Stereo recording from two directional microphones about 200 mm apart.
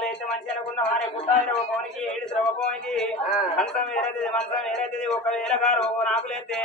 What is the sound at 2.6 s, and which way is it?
A man's voice, centre (ahead or behind).